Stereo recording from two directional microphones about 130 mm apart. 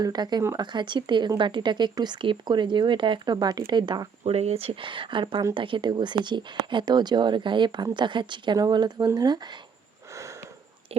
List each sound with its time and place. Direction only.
0.0 s speech: 30° right (ahead or behind)
4.2 s speech: 50° right (ahead or behind); by 9.6 s 35° right (ahead or behind)